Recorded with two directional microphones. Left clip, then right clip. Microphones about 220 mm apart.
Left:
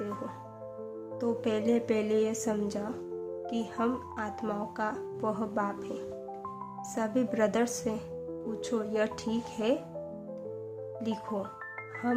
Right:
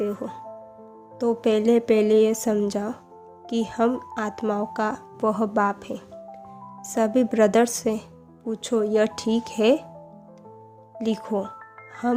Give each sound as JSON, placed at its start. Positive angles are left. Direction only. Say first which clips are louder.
{"t": 1.2, "sound": "speech", "louder": "right 9 dB", "side_deg": -35}
{"t": 6.9, "sound": "speech", "louder": "right 10 dB", "side_deg": -35}
{"t": 11.0, "sound": "speech", "louder": "right 10 dB", "side_deg": -35}